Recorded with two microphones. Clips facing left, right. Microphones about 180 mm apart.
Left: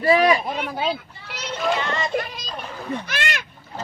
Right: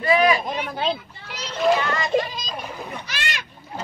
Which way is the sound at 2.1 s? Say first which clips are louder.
Right 6 dB; 25° right (ahead or behind).